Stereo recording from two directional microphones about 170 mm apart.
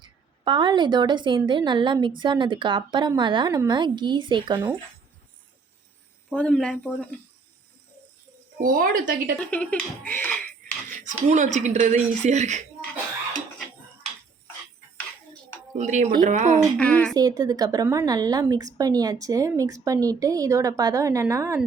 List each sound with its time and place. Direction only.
0.0 s a woman's voice: 25° right (ahead or behind)
6.3 s speech: 5° left (ahead or behind)
8.6 s speech: 55° right (ahead or behind)
9.3 s speech: 5° left (ahead or behind)
10.9 s a woman's voice: 50° right (ahead or behind)
15.7 s a woman's voice: 45° right (ahead or behind)
16.7 s speech: 5° left (ahead or behind)
17.2 s a woman's voice: 20° right (ahead or behind)